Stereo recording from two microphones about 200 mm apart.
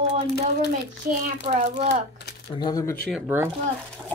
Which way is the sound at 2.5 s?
20° left (ahead or behind).